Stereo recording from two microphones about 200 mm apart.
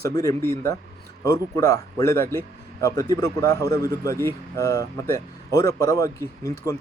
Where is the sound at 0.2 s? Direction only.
15° left (ahead or behind).